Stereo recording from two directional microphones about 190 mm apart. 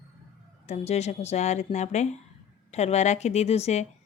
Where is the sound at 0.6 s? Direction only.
35° left (ahead or behind).